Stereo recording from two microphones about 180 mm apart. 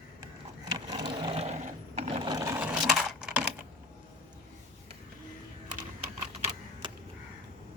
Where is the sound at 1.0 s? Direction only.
25° right (ahead or behind); by 2.8 s 10° right (ahead or behind).